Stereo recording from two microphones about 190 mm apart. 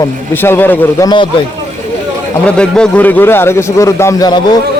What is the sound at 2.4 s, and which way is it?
A man's voice, 5° left (ahead or behind).